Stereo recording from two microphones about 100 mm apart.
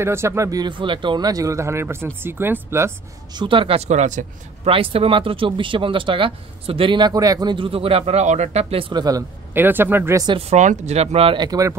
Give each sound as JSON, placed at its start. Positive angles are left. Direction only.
{"t": 0.0, "sound": "speech", "side_deg": -25}
{"t": 0.7, "sound": "speech", "side_deg": -55}
{"t": 3.3, "sound": "speech", "side_deg": -60}
{"t": 7.0, "sound": "speech", "side_deg": -40}
{"t": 7.5, "sound": "speech", "side_deg": -65}
{"t": 8.9, "sound": "speech", "side_deg": -40}
{"t": 9.5, "sound": "speech", "side_deg": -20}
{"t": 10.9, "sound": "speech", "side_deg": -90}
{"t": 11.3, "sound": "speech", "side_deg": -40}